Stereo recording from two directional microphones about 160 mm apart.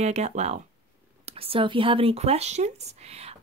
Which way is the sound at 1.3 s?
35° right (ahead or behind).